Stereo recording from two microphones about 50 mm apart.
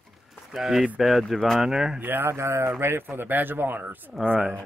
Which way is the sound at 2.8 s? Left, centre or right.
Right.